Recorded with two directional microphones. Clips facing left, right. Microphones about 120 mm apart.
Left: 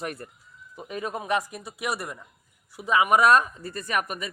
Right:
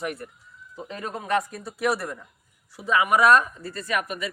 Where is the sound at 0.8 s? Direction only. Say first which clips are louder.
Left 1 dB; 15° left (ahead or behind).